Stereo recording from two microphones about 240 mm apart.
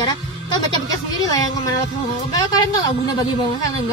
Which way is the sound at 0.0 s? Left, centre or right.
Centre.